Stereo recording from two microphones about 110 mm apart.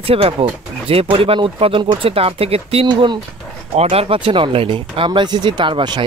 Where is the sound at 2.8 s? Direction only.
45° right (ahead or behind).